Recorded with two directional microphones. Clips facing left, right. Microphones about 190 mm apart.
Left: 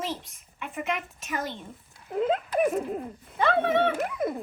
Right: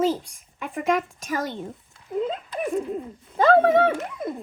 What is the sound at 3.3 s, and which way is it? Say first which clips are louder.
Speech: right 7 dB; 35° right (ahead or behind).